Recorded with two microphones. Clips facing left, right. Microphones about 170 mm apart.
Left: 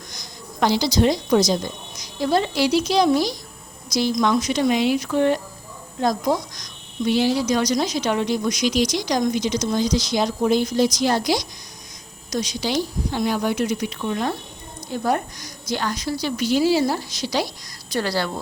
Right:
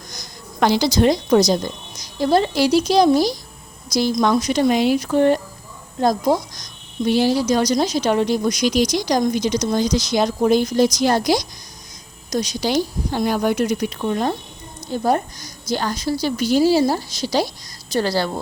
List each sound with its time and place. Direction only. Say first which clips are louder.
0.1 s a woman's voice: right 1 dB; 50° right (ahead or behind); by 18.3 s 30° right (ahead or behind)